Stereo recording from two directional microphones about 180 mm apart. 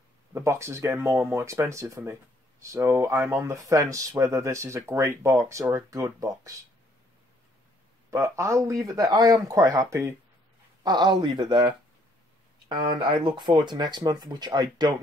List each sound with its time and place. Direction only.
0.3 s speech: 15° right (ahead or behind)
8.1 s speech: 15° right (ahead or behind)